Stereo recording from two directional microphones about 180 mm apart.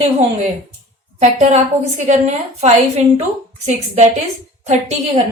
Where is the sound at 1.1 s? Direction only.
40° right (ahead or behind).